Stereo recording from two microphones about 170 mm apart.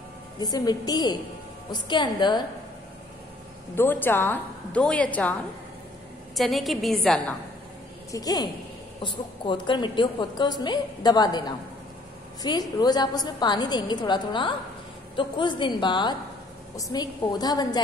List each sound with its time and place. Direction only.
0.4 s a woman's voice: 25° left (ahead or behind)
3.7 s a woman's voice: 10° left (ahead or behind)
6.3 s a woman's voice: centre (ahead or behind)
8.1 s a woman's voice: 20° left (ahead or behind)